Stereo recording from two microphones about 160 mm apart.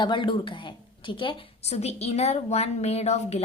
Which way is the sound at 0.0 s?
30° left (ahead or behind).